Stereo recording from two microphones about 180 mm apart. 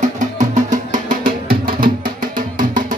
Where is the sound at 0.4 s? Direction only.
45° right (ahead or behind).